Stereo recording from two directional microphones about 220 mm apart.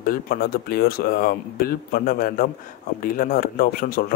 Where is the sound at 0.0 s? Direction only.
40° left (ahead or behind).